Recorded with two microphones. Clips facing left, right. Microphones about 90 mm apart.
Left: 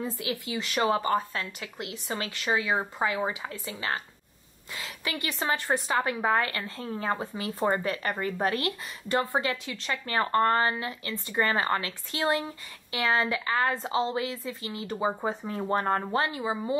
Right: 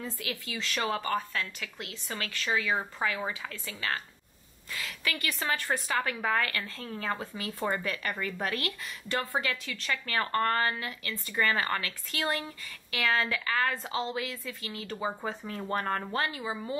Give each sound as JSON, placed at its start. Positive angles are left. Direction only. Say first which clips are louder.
{"t": 0.0, "sound": "a woman's voice", "louder": "left 5 dB", "side_deg": 20}